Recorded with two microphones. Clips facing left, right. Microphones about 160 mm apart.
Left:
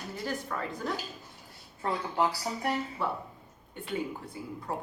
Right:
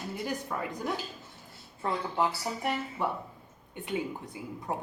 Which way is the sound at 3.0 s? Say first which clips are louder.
Right 1 dB; 15° right (ahead or behind).